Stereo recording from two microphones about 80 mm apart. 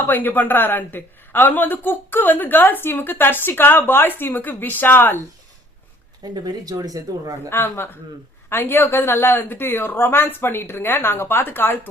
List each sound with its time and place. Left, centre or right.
0.1 s speech: left
6.2 s speech: right
7.5 s speech: left